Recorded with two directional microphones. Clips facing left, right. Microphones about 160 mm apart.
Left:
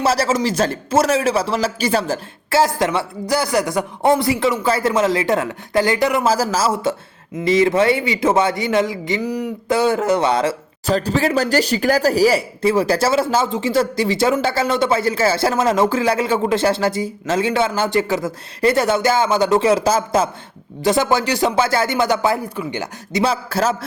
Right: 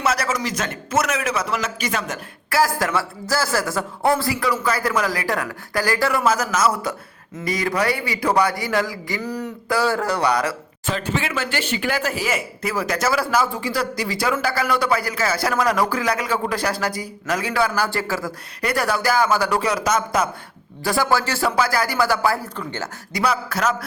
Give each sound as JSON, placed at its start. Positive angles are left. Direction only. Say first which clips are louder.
{"t": 0.0, "sound": "speech", "louder": "left 5 dB", "side_deg": 30}
{"t": 10.8, "sound": "speech", "louder": "left 7 dB", "side_deg": 40}
{"t": 23.2, "sound": "speech", "louder": "left 2 dB", "side_deg": 30}